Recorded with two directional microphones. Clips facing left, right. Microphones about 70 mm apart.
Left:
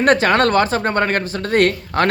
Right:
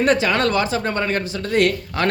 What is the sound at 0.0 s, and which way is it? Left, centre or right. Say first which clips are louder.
Speech: left 3 dB; left.